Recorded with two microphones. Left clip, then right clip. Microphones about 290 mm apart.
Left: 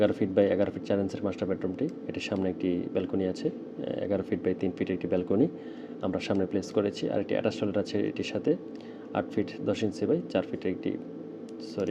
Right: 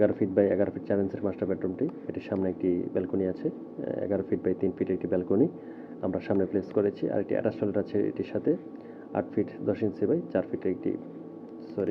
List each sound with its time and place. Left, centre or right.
0.0 s speech: left